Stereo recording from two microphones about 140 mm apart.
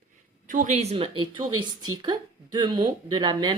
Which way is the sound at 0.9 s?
40° right (ahead or behind).